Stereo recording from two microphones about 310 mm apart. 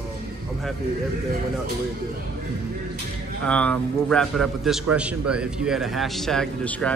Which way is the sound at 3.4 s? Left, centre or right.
Centre.